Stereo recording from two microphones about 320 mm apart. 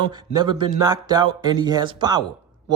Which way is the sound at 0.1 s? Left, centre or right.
Centre.